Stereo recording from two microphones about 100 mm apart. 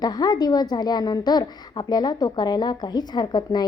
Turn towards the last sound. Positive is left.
turn(degrees=45)  # may be behind; listen again after turning